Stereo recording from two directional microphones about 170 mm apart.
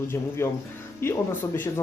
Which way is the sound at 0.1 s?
15° left (ahead or behind).